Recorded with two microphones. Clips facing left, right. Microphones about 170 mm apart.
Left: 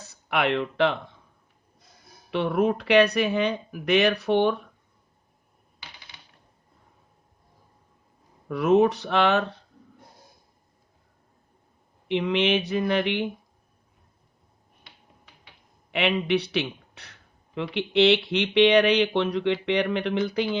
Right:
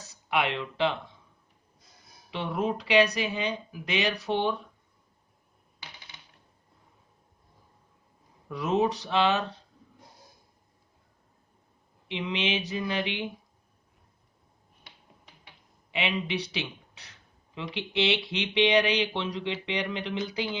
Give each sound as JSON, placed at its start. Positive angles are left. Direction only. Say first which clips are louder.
{"t": 0.0, "sound": "speech", "louder": "left 3 dB", "side_deg": 60}
{"t": 2.3, "sound": "speech", "louder": "left 7 dB", "side_deg": 60}
{"t": 8.4, "sound": "speech", "louder": "left 7 dB", "side_deg": 60}
{"t": 12.0, "sound": "speech", "louder": "left 8 dB", "side_deg": 60}
{"t": 15.9, "sound": "speech", "louder": "left 7 dB", "side_deg": 60}